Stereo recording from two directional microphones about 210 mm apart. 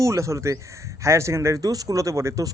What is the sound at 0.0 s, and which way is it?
Speech, 15° right (ahead or behind).